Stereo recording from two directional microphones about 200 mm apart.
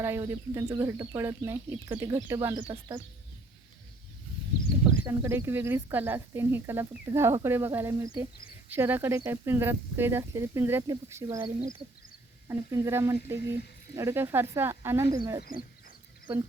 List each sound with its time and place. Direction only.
0.0 s speech: 15° right (ahead or behind)
5.0 s speech: 15° right (ahead or behind)
15.2 s speech: 25° right (ahead or behind)